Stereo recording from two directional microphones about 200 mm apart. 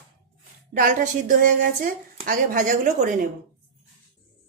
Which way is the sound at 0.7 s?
40° right (ahead or behind).